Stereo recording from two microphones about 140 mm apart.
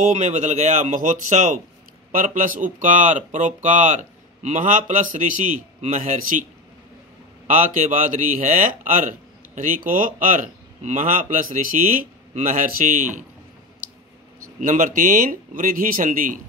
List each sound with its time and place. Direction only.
0.0 s speech: 55° right (ahead or behind)
7.4 s speech: 70° right (ahead or behind)
14.6 s speech: 65° right (ahead or behind)